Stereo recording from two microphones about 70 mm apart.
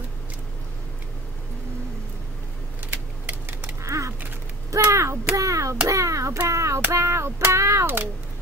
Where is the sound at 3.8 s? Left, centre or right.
Right.